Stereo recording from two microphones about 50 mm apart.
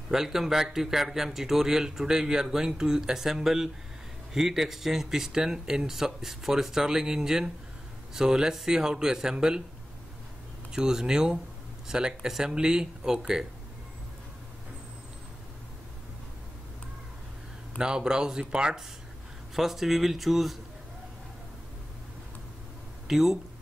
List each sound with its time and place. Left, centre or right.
0.1 s speech: centre
10.9 s speech: centre
17.7 s speech: centre
19.5 s speech: centre
23.0 s speech: centre